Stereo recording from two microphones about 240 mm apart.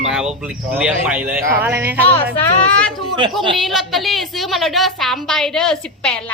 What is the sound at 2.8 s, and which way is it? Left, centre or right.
A woman's voice, centre.